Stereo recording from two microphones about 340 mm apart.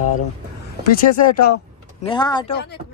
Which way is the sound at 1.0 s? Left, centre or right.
Left.